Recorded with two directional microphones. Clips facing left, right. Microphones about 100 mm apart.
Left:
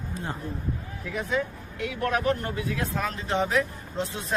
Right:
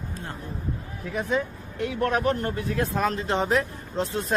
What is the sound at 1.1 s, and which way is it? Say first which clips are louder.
Speech: right 2 dB; 35° right (ahead or behind).